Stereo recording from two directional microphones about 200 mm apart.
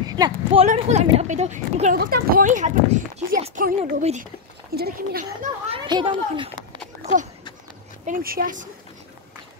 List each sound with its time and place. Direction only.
0.1 s speech: 20° right (ahead or behind)
0.7 s speech: 35° right (ahead or behind)
2.0 s speech: 50° right (ahead or behind); by 4.3 s 35° right (ahead or behind)
4.7 s speech: 50° right (ahead or behind)
5.7 s a child's voice: 25° right (ahead or behind)
8.0 s speech: 45° right (ahead or behind)